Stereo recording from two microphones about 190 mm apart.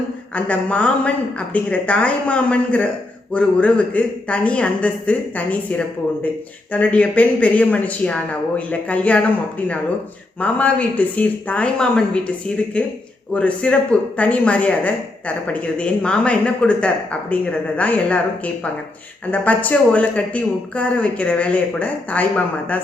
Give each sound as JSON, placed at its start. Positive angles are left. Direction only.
{"t": 0.3, "sound": "a man's voice", "side_deg": 5}